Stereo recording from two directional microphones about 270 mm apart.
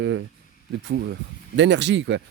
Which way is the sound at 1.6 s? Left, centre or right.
Right.